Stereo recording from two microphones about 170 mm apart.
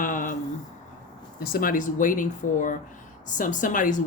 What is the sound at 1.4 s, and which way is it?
Speech, 60° left (ahead or behind).